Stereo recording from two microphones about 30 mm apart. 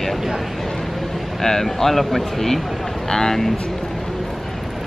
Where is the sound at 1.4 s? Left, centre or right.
Centre.